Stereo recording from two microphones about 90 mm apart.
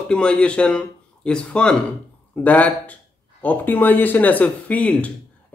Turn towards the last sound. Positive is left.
turn(degrees=15)  # may be behind; listen again after turning